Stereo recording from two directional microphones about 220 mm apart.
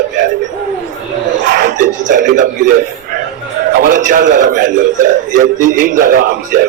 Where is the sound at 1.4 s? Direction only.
35° right (ahead or behind).